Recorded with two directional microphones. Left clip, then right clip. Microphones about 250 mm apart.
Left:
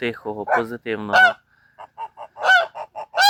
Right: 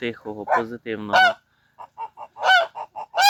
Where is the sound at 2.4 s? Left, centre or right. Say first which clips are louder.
Left 1 dB; centre.